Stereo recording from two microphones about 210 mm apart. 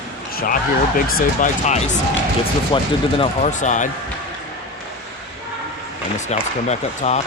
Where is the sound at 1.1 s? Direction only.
35° left (ahead or behind).